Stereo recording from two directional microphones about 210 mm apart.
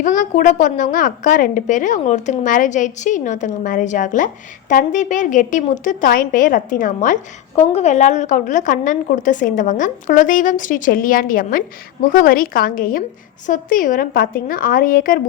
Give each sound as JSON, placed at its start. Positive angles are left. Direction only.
{"t": 0.0, "sound": "a woman's voice", "side_deg": 40}